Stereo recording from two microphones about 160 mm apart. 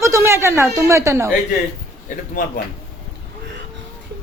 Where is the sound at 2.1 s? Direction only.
50° left (ahead or behind).